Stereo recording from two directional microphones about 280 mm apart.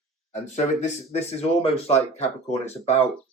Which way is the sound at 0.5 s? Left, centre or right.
Left.